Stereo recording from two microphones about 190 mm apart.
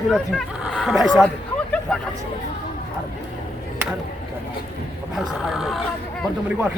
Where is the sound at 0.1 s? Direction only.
Centre (ahead or behind).